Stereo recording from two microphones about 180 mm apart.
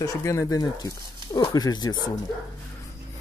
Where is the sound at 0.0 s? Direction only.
15° left (ahead or behind).